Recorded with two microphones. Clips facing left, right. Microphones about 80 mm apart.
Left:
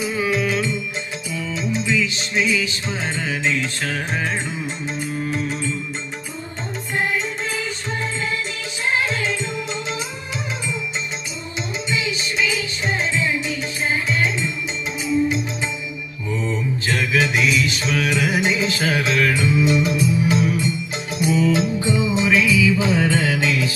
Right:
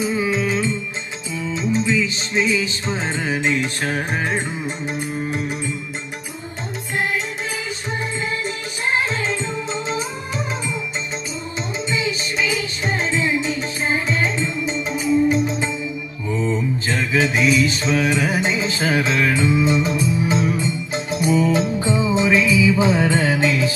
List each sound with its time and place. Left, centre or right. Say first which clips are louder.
0.0 s music: right 1 dB; right
1.6 s music: right 2 dB; right; by 5.7 s centre
8.9 s music: even; right
11.9 s music: right 1 dB; right
13.2 s music: right 2 dB; right
16.3 s music: right 3 dB; right